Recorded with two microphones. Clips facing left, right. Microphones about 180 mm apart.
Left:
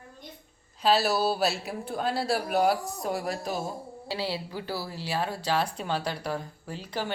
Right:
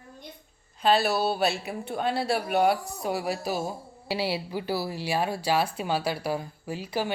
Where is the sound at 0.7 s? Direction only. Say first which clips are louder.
Right 1 dB; centre (ahead or behind).